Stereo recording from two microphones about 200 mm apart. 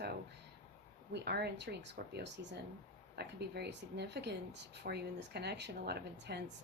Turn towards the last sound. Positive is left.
turn(degrees=-55)  # may be behind; listen again after turning